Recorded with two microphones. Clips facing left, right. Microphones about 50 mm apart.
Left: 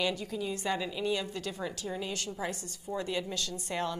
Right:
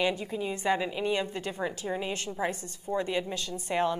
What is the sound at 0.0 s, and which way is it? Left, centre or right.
A woman's voice, right.